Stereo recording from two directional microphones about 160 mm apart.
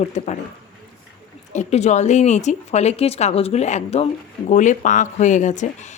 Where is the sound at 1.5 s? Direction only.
45° left (ahead or behind).